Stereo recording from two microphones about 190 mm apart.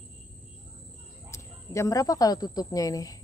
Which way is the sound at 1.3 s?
15° left (ahead or behind).